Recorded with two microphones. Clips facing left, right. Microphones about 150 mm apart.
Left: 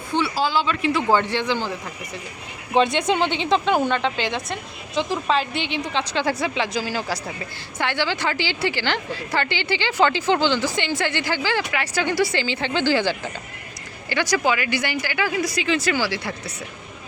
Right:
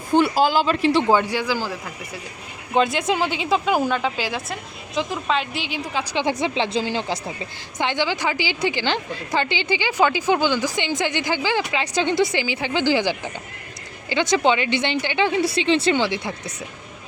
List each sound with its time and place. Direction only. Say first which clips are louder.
0.1 s speech: right 5 dB; 50° right (ahead or behind)
1.0 s a woman's voice: right 1 dB; 10° right (ahead or behind)
2.7 s a woman's voice: left 1 dB; centre (ahead or behind)
6.4 s a woman's voice: right 2 dB; 30° right (ahead or behind)